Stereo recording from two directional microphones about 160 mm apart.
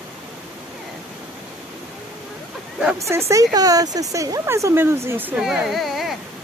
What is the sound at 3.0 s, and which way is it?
Speech, 15° right (ahead or behind).